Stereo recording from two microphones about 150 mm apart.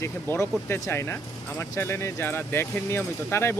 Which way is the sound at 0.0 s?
15° left (ahead or behind).